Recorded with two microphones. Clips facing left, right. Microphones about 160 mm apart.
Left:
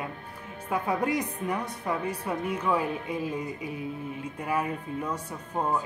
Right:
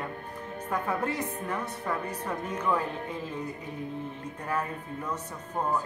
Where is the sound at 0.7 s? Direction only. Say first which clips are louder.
Left 3 dB; 10° left (ahead or behind).